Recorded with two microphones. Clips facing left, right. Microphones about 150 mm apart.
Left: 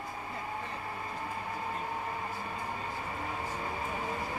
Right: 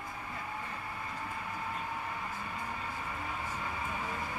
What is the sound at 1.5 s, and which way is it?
Vehicle, 30° left (ahead or behind).